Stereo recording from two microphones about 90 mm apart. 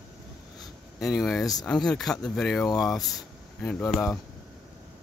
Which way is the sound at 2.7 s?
40° left (ahead or behind).